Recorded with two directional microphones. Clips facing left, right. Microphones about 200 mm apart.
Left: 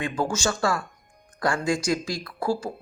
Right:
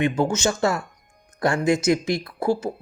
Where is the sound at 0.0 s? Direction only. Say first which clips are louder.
Right 5 dB; 20° right (ahead or behind).